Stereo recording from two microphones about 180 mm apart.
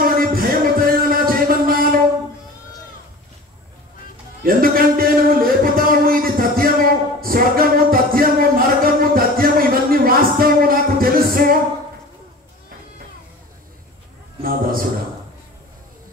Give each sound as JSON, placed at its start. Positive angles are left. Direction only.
{"t": 0.0, "sound": "music", "side_deg": -55}
{"t": 4.4, "sound": "music", "side_deg": -55}
{"t": 14.4, "sound": "a sound", "side_deg": -55}